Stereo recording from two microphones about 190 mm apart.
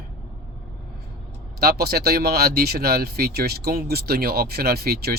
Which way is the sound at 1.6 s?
55° right (ahead or behind).